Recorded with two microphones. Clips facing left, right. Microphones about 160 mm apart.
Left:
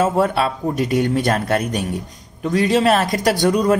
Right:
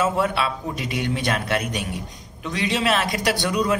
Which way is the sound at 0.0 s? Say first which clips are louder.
Left 5 dB; 40° left (ahead or behind).